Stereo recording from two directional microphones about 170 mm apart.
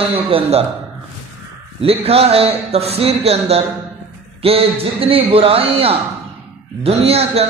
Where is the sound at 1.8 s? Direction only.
35° right (ahead or behind).